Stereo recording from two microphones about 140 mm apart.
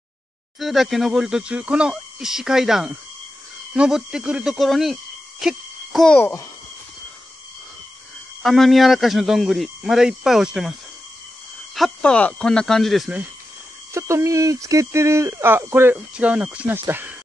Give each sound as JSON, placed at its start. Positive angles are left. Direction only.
{"t": 0.6, "sound": "speech", "side_deg": 0}
{"t": 5.4, "sound": "owl", "side_deg": 0}
{"t": 6.1, "sound": "speech", "side_deg": 15}
{"t": 8.4, "sound": "speech", "side_deg": 0}
{"t": 13.9, "sound": "speech", "side_deg": -20}